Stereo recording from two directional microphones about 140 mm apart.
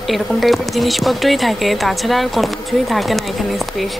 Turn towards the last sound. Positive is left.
turn(degrees=0)  # may be behind; listen again after turning